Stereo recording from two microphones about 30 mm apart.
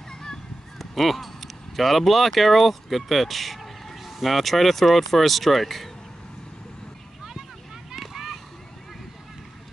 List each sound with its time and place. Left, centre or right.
0.1 s honk: left
0.7 s speech: centre
8.1 s a sound: centre